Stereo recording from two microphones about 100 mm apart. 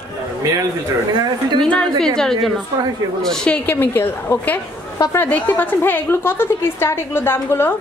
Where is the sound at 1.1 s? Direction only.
50° right (ahead or behind).